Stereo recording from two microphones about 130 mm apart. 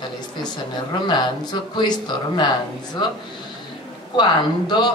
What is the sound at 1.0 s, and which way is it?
A man's voice, 35° left (ahead or behind).